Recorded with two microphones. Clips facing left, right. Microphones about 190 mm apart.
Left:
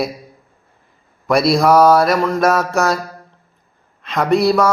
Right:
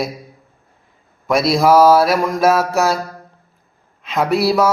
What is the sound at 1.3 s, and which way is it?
Speech, centre (ahead or behind).